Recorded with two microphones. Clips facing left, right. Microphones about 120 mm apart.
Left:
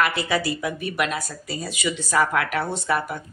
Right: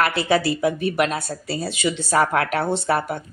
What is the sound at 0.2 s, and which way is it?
Speech, 25° right (ahead or behind).